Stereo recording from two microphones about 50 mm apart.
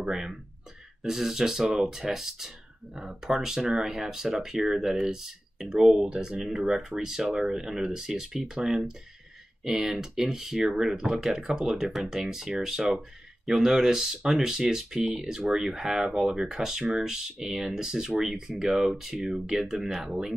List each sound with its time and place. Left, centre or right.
0.0 s speech: centre